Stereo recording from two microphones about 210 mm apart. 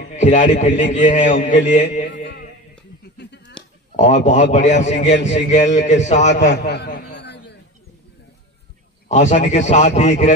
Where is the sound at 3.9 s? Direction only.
35° left (ahead or behind).